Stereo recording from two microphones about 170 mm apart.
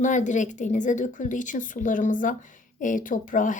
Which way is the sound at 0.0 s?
45° left (ahead or behind).